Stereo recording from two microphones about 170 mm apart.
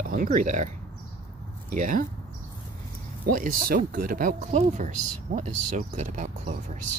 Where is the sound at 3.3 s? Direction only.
55° right (ahead or behind).